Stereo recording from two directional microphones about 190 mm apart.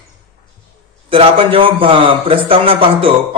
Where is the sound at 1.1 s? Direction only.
30° right (ahead or behind).